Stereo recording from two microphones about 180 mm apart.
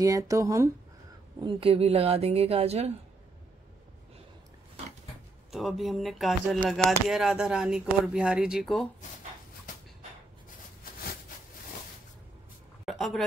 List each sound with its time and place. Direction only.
0.0 s speech: 20° right (ahead or behind)
1.4 s a woman's voice: 30° right (ahead or behind)
5.5 s speech: centre (ahead or behind)
12.8 s a sound: centre (ahead or behind)